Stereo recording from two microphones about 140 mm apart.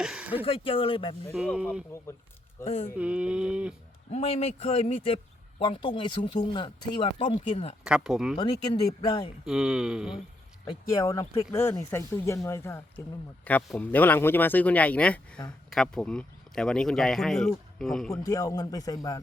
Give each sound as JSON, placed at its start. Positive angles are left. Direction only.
{"t": 0.0, "sound": "a sound", "side_deg": -5}
{"t": 0.4, "sound": "speech", "side_deg": 40}
{"t": 1.4, "sound": "a sound", "side_deg": -5}
{"t": 2.6, "sound": "speech", "side_deg": 45}
{"t": 3.0, "sound": "a sound", "side_deg": -10}
{"t": 4.1, "sound": "speech", "side_deg": 45}
{"t": 7.5, "sound": "speech", "side_deg": 50}
{"t": 7.9, "sound": "speech", "side_deg": -5}
{"t": 8.9, "sound": "speech", "side_deg": 25}
{"t": 9.4, "sound": "speech", "side_deg": -5}
{"t": 11.0, "sound": "speech", "side_deg": 25}
{"t": 18.1, "sound": "speech", "side_deg": 25}